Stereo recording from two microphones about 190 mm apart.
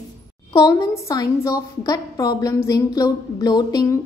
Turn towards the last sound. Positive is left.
turn(degrees=20)  # may be behind; listen again after turning